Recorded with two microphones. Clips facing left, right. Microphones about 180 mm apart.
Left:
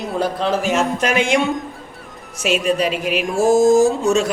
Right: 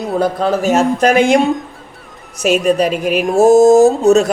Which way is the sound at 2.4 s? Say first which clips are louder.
Right 6 dB; 40° right (ahead or behind).